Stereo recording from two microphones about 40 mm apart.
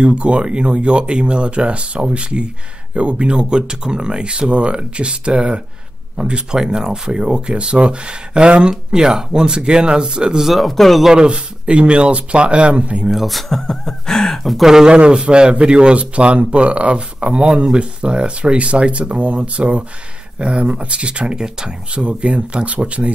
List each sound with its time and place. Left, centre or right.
0.0 s speech: right
10.4 s speech: centre
11.2 s speech: right
13.1 s speech: centre
14.6 s speech: centre
14.9 s speech: right
21.9 s speech: right